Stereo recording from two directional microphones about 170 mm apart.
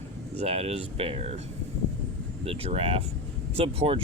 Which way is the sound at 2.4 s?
35° right (ahead or behind).